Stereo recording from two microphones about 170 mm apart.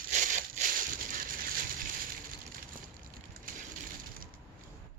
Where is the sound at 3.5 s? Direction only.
55° right (ahead or behind).